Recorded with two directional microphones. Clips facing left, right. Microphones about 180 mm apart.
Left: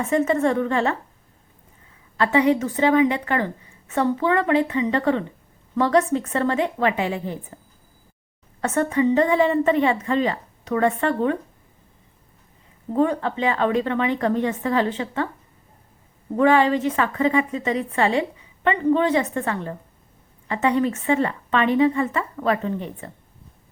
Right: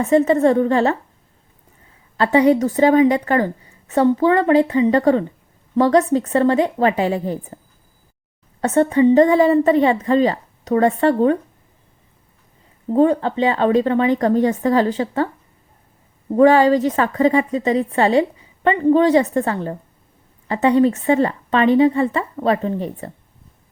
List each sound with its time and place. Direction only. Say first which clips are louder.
0.0 s a woman's voice: right 6 dB; 35° right (ahead or behind)
2.1 s a woman's voice: right 4 dB; 35° right (ahead or behind)
8.6 s a woman's voice: right 6 dB; 30° right (ahead or behind)
12.9 s a woman's voice: right 6 dB; 30° right (ahead or behind)
16.4 s a woman's voice: right 5 dB; 35° right (ahead or behind)